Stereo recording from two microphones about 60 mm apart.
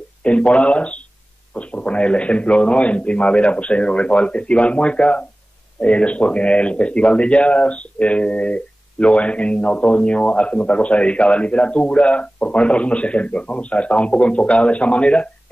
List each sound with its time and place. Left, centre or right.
0.2 s speech: centre